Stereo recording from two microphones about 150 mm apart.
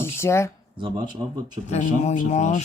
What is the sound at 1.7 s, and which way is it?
Speech, 50° left (ahead or behind).